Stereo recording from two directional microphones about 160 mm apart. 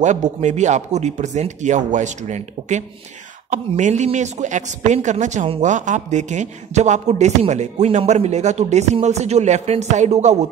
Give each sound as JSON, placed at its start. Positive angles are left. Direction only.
{"t": 0.0, "sound": "speech", "side_deg": -45}